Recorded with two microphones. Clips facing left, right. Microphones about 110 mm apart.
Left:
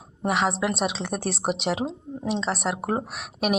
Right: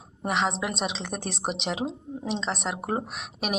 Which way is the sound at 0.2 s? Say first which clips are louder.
Left 3 dB; 5° left (ahead or behind).